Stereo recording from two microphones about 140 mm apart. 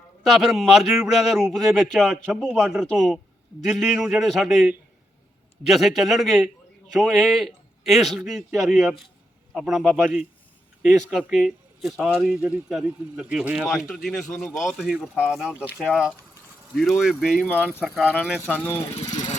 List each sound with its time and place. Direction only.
0.3 s speech: centre (ahead or behind)
5.7 s a man's voice: centre (ahead or behind)
17.4 s speech: 10° left (ahead or behind)
17.7 s speech: 10° right (ahead or behind)
18.4 s speech: 15° left (ahead or behind)
19.1 s vehicle: 60° left (ahead or behind)